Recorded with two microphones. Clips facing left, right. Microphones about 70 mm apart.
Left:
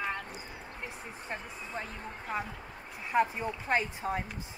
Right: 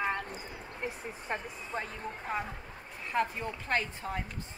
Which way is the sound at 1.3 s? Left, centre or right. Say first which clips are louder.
Right 4 dB; right.